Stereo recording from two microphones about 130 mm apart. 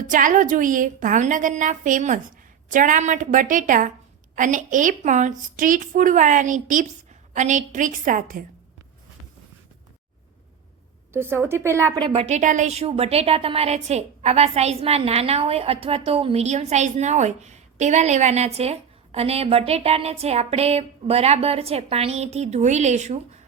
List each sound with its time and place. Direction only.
0.1 s a woman's voice: 90° right
2.6 s a woman's voice: 90° right; by 5.3 s 70° right (ahead or behind)
5.5 s a woman's voice: 90° right
7.3 s a woman's voice: 70° right (ahead or behind); by 8.4 s 90° right
11.1 s a woman's voice: 20° right (ahead or behind)
11.9 s speech: 35° right (ahead or behind)
12.2 s a woman's voice: 70° right (ahead or behind)